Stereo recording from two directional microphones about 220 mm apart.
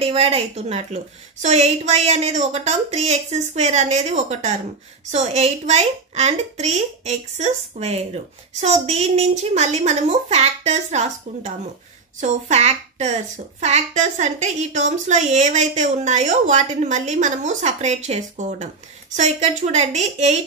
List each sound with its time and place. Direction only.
0.0 s a woman's voice: 25° right (ahead or behind)